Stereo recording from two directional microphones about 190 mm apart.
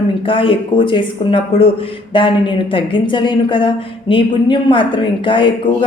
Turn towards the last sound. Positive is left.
turn(degrees=25)  # may be behind; listen again after turning